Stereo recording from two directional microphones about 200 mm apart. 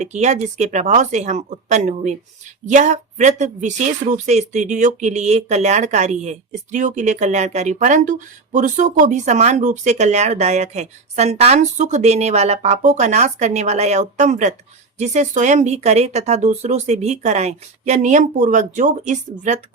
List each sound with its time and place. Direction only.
0.0 s speech: 35° right (ahead or behind)